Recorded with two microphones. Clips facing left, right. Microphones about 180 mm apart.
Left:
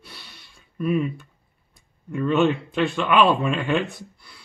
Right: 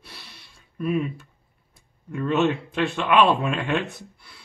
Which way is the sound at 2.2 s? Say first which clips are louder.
Left 2 dB; centre (ahead or behind).